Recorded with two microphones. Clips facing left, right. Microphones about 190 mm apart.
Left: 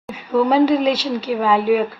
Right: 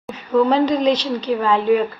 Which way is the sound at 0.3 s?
10° left (ahead or behind).